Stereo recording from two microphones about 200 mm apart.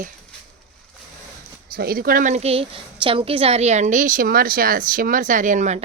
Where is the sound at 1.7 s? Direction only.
50° right (ahead or behind).